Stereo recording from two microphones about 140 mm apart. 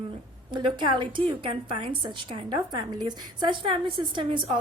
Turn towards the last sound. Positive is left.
turn(degrees=-35)  # may be behind; listen again after turning